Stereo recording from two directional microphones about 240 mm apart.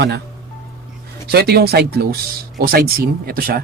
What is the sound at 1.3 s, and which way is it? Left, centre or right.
Speech, right.